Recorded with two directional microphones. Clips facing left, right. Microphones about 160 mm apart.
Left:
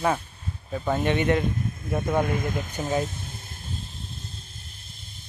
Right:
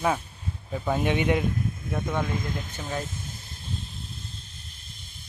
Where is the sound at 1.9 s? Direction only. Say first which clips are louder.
Left 5 dB; 10° left (ahead or behind).